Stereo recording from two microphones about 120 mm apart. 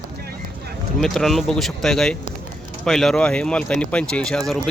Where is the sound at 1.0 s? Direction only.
5° left (ahead or behind).